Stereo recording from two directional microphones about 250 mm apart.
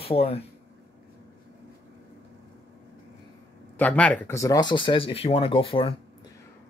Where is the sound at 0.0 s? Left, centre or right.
Left.